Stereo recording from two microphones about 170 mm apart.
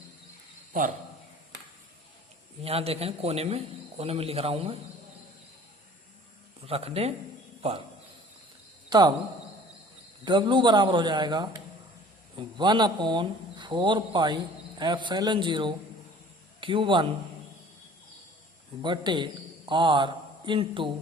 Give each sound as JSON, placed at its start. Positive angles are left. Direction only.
{"t": 2.6, "sound": "a man's voice", "side_deg": -35}
{"t": 6.7, "sound": "a man's voice", "side_deg": -35}
{"t": 8.9, "sound": "speech", "side_deg": -25}
{"t": 10.2, "sound": "a man's voice", "side_deg": -25}
{"t": 18.8, "sound": "a man's voice", "side_deg": -25}